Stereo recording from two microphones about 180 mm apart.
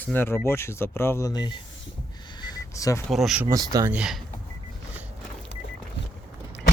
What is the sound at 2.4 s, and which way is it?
Vehicle, 20° left (ahead or behind).